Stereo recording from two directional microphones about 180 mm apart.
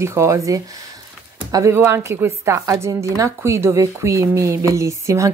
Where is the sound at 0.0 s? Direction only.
15° right (ahead or behind).